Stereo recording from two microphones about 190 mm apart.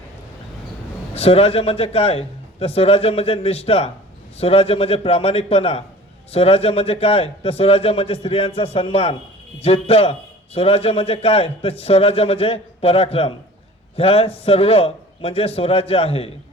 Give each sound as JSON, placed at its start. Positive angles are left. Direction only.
{"t": 1.1, "sound": "a man's voice", "side_deg": 30}